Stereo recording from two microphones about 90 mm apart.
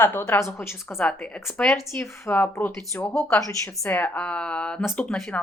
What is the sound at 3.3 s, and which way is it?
Speech, 35° left (ahead or behind).